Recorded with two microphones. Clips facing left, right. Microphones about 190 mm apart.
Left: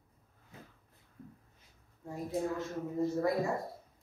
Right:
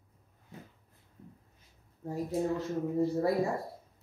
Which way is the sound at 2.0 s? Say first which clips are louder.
Right 3 dB; 35° right (ahead or behind).